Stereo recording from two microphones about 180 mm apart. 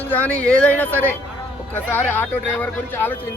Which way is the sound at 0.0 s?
10° left (ahead or behind).